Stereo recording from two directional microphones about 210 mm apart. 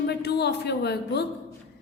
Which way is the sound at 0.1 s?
50° left (ahead or behind).